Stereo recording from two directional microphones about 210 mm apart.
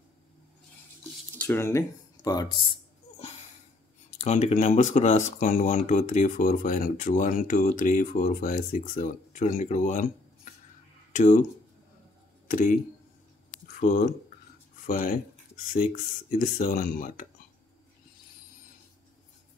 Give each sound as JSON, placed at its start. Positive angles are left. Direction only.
{"t": 1.4, "sound": "speech", "side_deg": 10}
{"t": 4.2, "sound": "speech", "side_deg": 30}
{"t": 12.4, "sound": "speech", "side_deg": 40}
{"t": 13.7, "sound": "a sound", "side_deg": 40}
{"t": 14.9, "sound": "speech", "side_deg": 40}